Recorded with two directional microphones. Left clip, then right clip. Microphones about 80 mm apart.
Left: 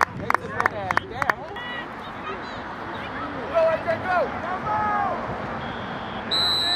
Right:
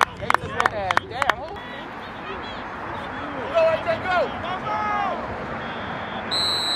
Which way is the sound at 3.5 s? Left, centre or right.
Right.